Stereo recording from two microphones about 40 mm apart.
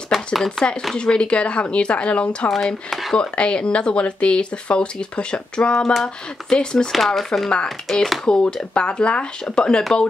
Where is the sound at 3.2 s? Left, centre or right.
Left.